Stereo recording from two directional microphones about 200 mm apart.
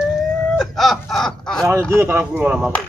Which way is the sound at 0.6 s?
Centre (ahead or behind).